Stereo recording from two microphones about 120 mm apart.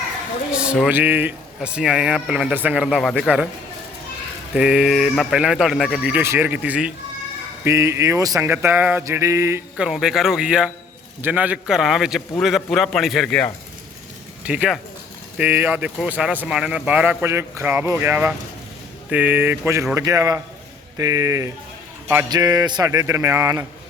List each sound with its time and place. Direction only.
0.5 s speech: 5° right (ahead or behind)
4.5 s a man's voice: 5° right (ahead or behind)
6.2 s speech: 20° right (ahead or behind)
7.6 s speech: 20° right (ahead or behind)
9.0 s speech: 25° right (ahead or behind)
9.7 s a man's voice: 5° right (ahead or behind)
14.4 s speech: 10° right (ahead or behind)
17.2 s speech: 20° right (ahead or behind)
22.9 s speech: 25° right (ahead or behind)